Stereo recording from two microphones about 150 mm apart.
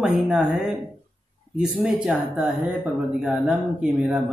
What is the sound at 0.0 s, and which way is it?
Speech, 5° right (ahead or behind).